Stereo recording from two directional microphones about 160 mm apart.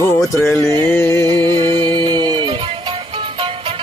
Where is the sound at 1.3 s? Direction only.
30° right (ahead or behind).